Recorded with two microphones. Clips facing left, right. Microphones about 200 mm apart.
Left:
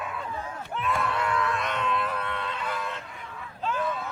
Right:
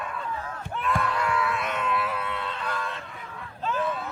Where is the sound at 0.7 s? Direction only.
Centre (ahead or behind).